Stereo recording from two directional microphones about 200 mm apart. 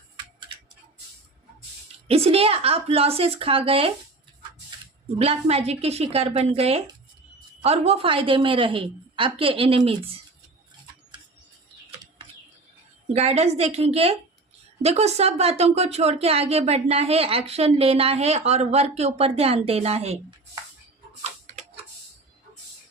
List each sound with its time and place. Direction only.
2.0 s a woman's voice: 30° right (ahead or behind)
5.1 s a woman's voice: 30° right (ahead or behind)
13.1 s a woman's voice: 30° right (ahead or behind)
21.2 s tick-tock: 35° right (ahead or behind)